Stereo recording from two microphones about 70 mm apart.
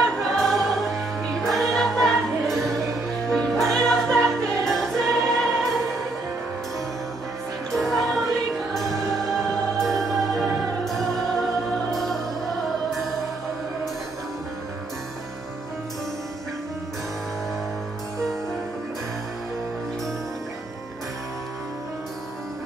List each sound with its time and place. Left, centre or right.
0.0 s music: centre
7.7 s music: centre